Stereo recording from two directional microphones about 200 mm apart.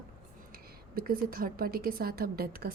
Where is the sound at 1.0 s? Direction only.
45° right (ahead or behind).